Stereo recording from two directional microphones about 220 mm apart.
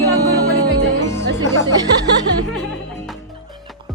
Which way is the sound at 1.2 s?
15° left (ahead or behind).